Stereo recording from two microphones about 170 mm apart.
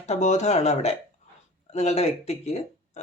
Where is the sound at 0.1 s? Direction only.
45° left (ahead or behind).